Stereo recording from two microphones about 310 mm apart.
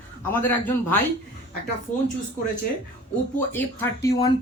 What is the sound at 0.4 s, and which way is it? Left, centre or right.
Speech, centre.